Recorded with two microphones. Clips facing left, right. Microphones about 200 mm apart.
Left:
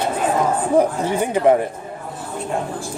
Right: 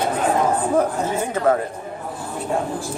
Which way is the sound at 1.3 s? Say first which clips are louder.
Left 4 dB; 15° left (ahead or behind).